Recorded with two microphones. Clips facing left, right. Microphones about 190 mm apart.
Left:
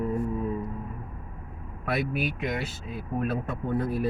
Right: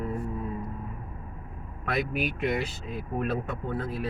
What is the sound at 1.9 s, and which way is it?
Speech, 5° left (ahead or behind).